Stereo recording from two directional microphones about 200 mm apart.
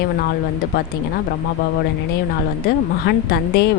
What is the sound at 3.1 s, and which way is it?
Speech, 55° left (ahead or behind).